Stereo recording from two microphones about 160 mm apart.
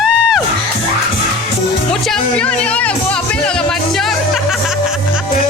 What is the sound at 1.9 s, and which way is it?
Music, 5° left (ahead or behind).